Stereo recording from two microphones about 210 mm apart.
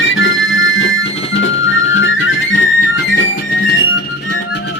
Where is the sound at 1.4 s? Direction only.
65° left (ahead or behind).